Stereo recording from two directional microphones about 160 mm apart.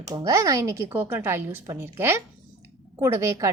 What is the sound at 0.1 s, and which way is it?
A woman's voice, 20° right (ahead or behind).